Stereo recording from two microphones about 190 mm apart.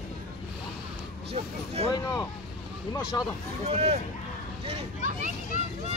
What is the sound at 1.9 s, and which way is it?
Speech, 20° left (ahead or behind).